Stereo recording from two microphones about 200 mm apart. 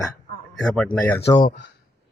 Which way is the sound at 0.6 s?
5° left (ahead or behind).